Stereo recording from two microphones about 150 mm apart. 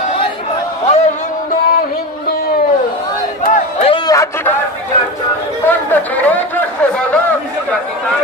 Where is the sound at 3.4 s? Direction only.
55° left (ahead or behind).